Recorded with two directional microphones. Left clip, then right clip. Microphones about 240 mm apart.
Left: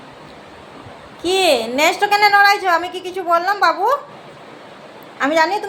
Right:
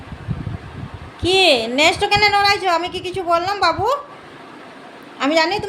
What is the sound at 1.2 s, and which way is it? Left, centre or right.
A woman's voice, centre.